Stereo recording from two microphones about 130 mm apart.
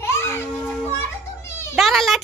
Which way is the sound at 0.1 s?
20° left (ahead or behind).